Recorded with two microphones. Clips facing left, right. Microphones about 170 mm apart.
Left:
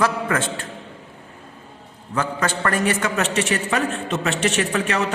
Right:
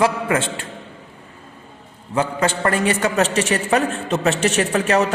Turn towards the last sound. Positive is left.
turn(degrees=-40)  # may be behind; listen again after turning